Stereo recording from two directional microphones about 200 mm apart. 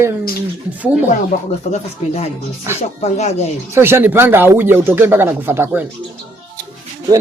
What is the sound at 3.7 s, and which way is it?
Speech, 10° right (ahead or behind).